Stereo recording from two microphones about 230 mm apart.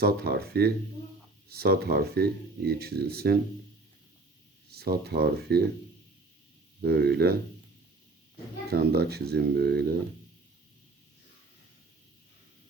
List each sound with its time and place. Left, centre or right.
0.0 s speech: right
4.7 s speech: right
6.8 s speech: right
8.7 s speech: right